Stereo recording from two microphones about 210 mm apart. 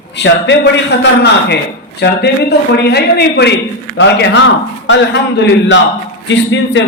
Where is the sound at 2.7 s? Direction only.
50° left (ahead or behind).